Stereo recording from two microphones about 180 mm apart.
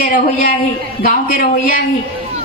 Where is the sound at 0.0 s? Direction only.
50° left (ahead or behind).